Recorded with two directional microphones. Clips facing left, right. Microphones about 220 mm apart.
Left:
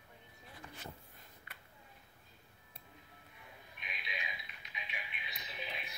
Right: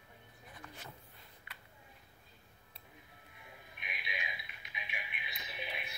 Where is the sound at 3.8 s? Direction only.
10° right (ahead or behind).